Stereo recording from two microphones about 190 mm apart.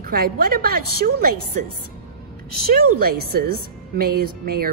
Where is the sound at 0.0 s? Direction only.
50° right (ahead or behind).